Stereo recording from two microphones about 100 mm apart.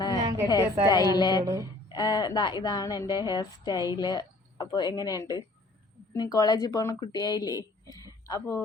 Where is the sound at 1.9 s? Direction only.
40° left (ahead or behind).